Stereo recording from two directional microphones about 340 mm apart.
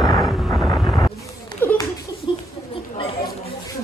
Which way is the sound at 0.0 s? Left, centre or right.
Centre.